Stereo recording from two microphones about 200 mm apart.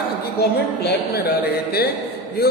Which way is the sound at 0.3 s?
55° left (ahead or behind).